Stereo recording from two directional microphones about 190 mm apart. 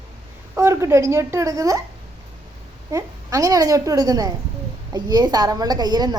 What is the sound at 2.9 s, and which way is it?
A woman's voice, 15° right (ahead or behind).